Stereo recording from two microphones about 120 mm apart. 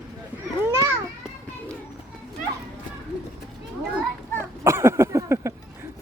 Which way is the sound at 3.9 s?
20° right (ahead or behind).